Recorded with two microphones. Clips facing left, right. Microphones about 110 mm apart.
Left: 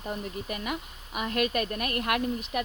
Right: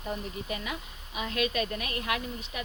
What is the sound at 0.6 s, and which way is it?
A woman's voice, 55° left (ahead or behind).